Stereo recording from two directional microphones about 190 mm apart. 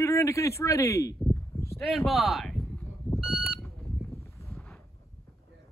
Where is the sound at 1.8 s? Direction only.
Centre (ahead or behind).